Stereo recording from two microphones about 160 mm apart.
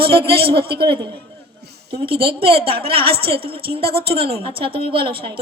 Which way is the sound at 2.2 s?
35° right (ahead or behind).